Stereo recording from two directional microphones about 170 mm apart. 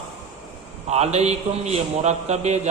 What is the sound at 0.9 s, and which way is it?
A man's voice, 40° right (ahead or behind).